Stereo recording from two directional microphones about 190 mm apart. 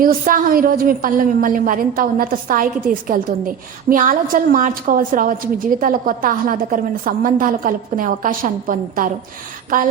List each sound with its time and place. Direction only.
0.0 s a woman's voice: 45° right (ahead or behind)